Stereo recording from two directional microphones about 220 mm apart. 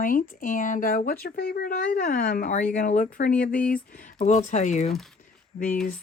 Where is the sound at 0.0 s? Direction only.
40° left (ahead or behind).